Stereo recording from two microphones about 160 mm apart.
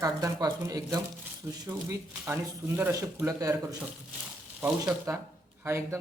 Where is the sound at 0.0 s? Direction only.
20° right (ahead or behind).